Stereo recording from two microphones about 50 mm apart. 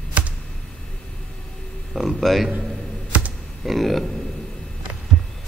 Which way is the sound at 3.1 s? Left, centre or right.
Right.